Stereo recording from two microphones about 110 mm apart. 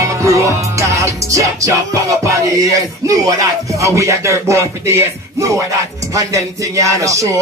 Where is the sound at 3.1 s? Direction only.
30° right (ahead or behind).